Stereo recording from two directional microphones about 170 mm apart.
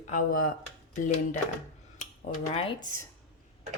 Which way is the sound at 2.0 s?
50° left (ahead or behind).